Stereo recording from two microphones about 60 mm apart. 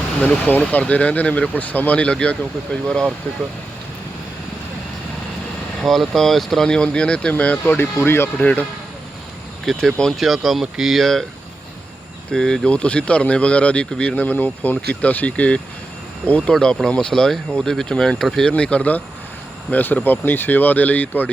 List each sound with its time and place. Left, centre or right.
0.7 s speech: left
5.8 s speech: centre; by 7.7 s left
7.7 s speech: left
8.4 s speech: left
9.6 s speech: centre
12.3 s speech: centre
14.2 s speech: left; by 18.5 s centre
18.5 s speech: centre